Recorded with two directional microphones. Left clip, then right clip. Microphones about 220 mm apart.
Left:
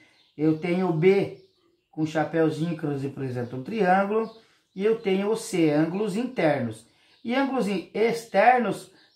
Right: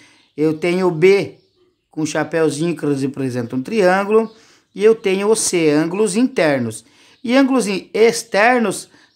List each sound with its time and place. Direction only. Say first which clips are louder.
0.4 s speech: right 8 dB; 50° right (ahead or behind)